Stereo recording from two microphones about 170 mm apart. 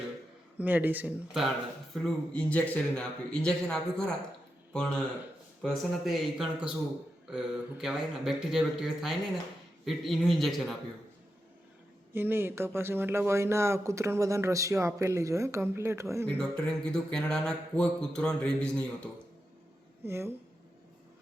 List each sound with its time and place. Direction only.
0.6 s speech: 10° right (ahead or behind)
12.1 s speech: 10° right (ahead or behind)
16.2 s speech: 10° left (ahead or behind)
20.1 s speech: 15° right (ahead or behind)